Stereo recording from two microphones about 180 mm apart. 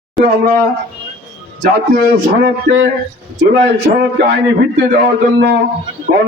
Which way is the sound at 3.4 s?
65° right (ahead or behind).